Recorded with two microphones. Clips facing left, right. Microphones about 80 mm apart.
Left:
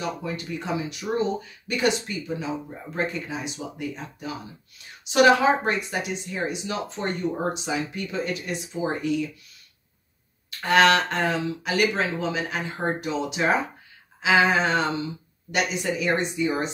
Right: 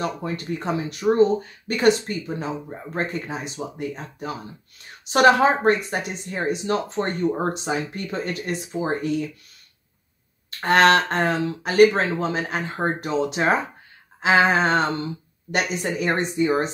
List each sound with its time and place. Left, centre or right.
0.0 s speech: right
10.6 s speech: right